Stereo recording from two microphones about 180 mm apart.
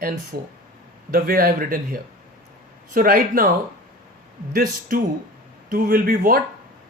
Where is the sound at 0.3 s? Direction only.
60° right (ahead or behind).